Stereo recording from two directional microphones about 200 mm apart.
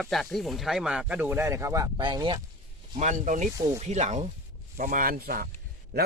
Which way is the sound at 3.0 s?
40° right (ahead or behind).